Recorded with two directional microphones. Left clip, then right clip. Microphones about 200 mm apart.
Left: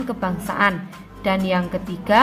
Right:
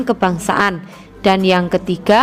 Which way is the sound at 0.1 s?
45° right (ahead or behind).